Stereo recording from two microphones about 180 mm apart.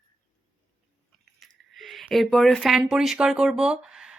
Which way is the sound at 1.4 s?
Centre (ahead or behind).